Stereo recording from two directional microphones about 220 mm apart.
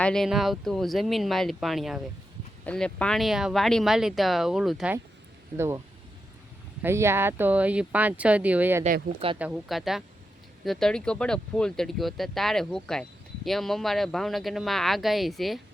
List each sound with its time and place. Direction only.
0.0 s speech: centre (ahead or behind)
5.5 s speech: 10° right (ahead or behind)
6.8 s speech: 10° right (ahead or behind)
8.8 s speech: 25° right (ahead or behind)
9.4 s speech: centre (ahead or behind)